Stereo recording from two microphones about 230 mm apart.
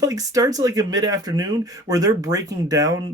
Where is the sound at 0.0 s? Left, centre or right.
Centre.